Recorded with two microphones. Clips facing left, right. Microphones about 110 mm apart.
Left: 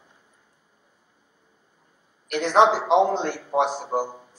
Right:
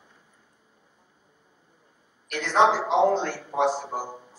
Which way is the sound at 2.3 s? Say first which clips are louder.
Left 3 dB; 20° left (ahead or behind).